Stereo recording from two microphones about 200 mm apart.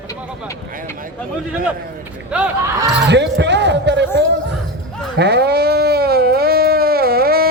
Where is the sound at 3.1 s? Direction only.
60° right (ahead or behind).